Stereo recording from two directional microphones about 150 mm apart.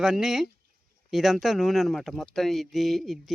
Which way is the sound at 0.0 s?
5° right (ahead or behind).